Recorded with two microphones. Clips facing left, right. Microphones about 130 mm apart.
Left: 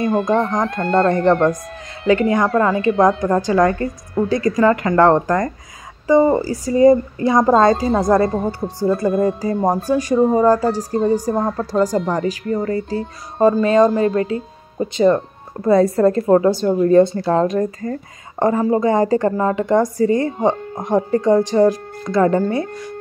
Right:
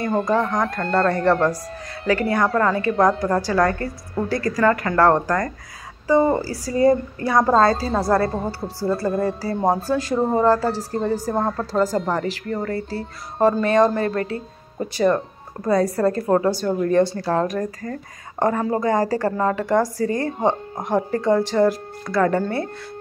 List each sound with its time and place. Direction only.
0.0 s a woman's voice: 20° left (ahead or behind)